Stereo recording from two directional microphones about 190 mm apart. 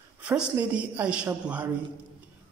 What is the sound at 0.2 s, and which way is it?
A man's voice, 5° right (ahead or behind).